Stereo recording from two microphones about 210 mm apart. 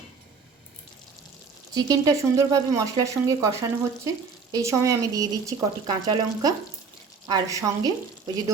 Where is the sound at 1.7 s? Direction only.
15° right (ahead or behind).